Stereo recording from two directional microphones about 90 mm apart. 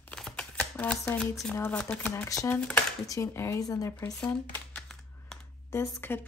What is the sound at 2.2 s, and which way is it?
Speech, 40° left (ahead or behind).